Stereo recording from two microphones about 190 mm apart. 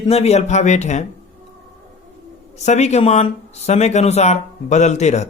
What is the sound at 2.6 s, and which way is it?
Speech, 35° left (ahead or behind).